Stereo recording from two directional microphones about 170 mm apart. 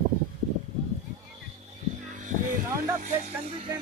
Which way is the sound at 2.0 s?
45° right (ahead or behind).